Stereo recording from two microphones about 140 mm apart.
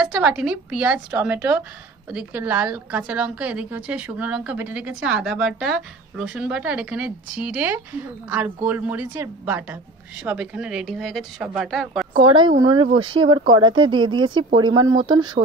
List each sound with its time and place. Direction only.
0.0 s a woman's voice: 5° right (ahead or behind)
12.2 s speech: 35° right (ahead or behind)